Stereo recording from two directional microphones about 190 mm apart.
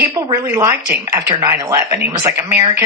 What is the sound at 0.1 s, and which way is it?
Speech, 20° right (ahead or behind).